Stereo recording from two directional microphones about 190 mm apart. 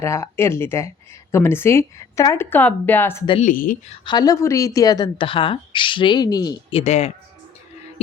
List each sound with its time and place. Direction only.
0.0 s speech: 15° left (ahead or behind)
3.4 s speech: 45° left (ahead or behind)
4.0 s speech: 20° left (ahead or behind)